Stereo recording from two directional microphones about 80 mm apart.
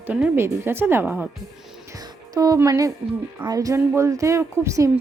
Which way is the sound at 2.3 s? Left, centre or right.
Right.